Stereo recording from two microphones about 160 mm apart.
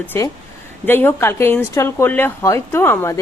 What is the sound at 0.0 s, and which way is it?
Speech, 10° left (ahead or behind).